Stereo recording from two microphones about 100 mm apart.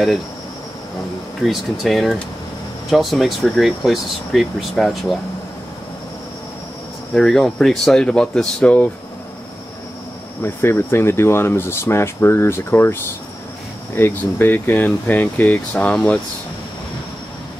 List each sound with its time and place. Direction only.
1.4 s speech: centre (ahead or behind)
7.2 s speech: 5° left (ahead or behind)
10.4 s speech: 25° left (ahead or behind)
13.9 s speech: 20° left (ahead or behind)